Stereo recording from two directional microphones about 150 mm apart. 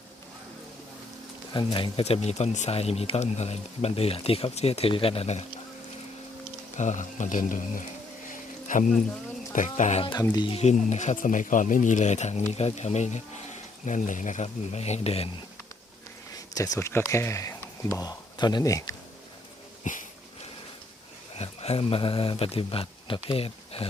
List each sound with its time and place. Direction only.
1.5 s speech: 35° left (ahead or behind)
6.7 s speech: 55° left (ahead or behind)
8.3 s a sound: 60° left (ahead or behind)
9.5 s speech: 55° left (ahead or behind)
10.3 s speech: 30° left (ahead or behind)
10.6 s speech: 50° left (ahead or behind)
16.3 s a sound: 25° left (ahead or behind)
17.1 s speech: 20° left (ahead or behind)
19.8 s a sound: 60° left (ahead or behind)
21.3 s speech: 45° left (ahead or behind)